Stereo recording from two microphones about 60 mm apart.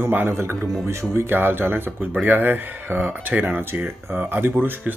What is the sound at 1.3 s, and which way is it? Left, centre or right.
Speech, right.